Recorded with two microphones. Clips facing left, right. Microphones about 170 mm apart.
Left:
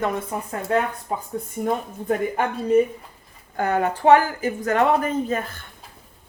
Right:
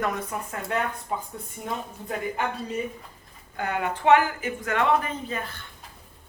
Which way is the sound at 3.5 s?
45° left (ahead or behind).